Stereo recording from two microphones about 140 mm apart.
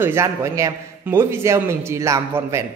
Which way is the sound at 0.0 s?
20° right (ahead or behind).